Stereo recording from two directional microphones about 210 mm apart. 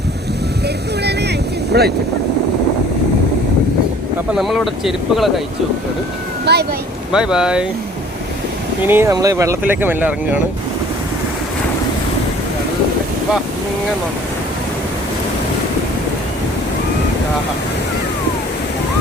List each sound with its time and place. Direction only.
1.0 s vehicle: 50° right (ahead or behind)
4.4 s speech: centre (ahead or behind)
6.4 s speech: 50° right (ahead or behind)
7.1 s speech: 5° right (ahead or behind)
8.8 s speech: 10° right (ahead or behind)